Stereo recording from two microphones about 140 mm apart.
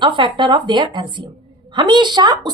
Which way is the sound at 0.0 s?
35° right (ahead or behind).